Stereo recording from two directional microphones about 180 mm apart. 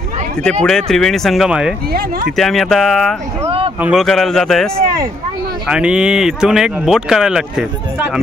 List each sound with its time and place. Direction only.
0.4 s speech: 5° left (ahead or behind)
1.9 s speech: 60° right (ahead or behind)
2.3 s speech: centre (ahead or behind)
5.7 s speech: 5° right (ahead or behind)